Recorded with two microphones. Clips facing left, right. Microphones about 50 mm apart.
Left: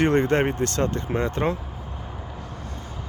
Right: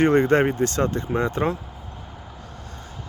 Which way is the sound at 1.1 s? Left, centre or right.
Centre.